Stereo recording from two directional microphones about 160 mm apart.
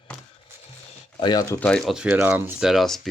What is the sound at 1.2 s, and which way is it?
Speech, 25° left (ahead or behind).